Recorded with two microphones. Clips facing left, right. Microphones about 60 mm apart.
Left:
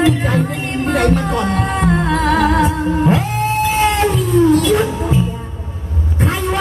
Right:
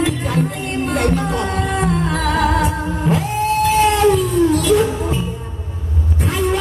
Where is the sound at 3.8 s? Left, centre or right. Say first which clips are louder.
Right 1 dB; left.